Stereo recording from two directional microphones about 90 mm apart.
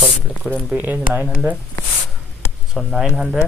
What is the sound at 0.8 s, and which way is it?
Speech, 20° right (ahead or behind).